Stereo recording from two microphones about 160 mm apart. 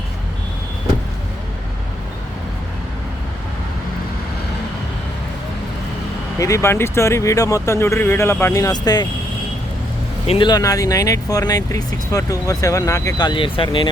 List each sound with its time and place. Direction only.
6.4 s speech: 20° left (ahead or behind)
10.2 s speech: 30° left (ahead or behind)